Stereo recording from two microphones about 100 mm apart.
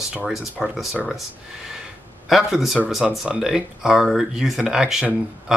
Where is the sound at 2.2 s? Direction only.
Centre (ahead or behind).